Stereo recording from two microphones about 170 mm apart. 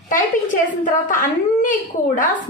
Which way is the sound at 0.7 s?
50° left (ahead or behind).